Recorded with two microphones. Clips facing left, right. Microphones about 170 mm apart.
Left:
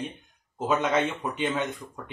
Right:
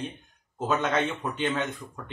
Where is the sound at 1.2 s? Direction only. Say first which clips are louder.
Even; 10° left (ahead or behind).